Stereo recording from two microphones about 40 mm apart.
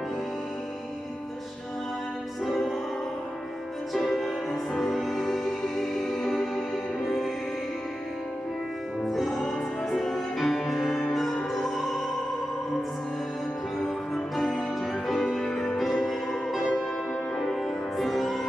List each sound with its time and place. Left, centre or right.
3.9 s music: centre
9.0 s music: centre
13.7 s music: centre
15.8 s music: centre